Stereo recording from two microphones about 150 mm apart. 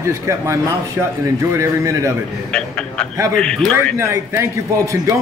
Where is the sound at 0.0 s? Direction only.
20° right (ahead or behind).